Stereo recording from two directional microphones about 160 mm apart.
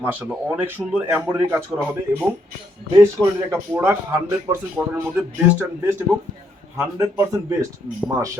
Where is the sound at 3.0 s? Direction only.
15° right (ahead or behind).